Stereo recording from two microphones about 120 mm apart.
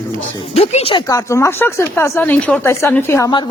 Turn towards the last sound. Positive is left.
turn(degrees=20)  # may be behind; listen again after turning